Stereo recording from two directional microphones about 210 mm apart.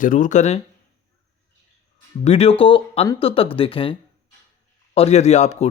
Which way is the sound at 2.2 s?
30° left (ahead or behind).